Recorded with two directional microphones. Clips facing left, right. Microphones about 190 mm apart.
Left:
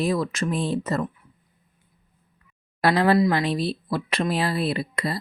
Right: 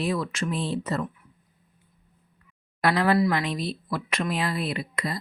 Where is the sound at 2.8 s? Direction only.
30° left (ahead or behind).